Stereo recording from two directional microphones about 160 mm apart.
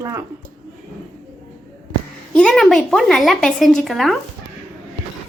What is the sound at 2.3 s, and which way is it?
Speech, 5° left (ahead or behind).